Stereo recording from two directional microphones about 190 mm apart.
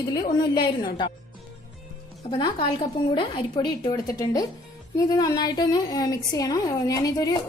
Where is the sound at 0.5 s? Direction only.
25° left (ahead or behind).